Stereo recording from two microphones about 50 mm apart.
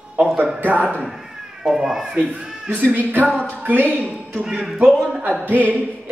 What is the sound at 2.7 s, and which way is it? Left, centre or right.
Speech, right.